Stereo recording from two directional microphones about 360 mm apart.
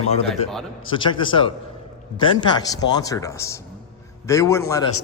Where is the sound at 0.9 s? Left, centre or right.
Centre.